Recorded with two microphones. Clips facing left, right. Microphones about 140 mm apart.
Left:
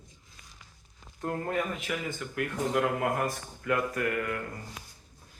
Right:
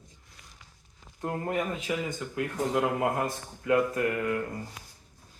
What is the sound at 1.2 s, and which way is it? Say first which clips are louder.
Speech: right 1 dB; 15° right (ahead or behind).